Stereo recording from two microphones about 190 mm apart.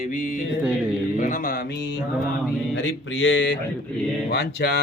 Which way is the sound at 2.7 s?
85° left.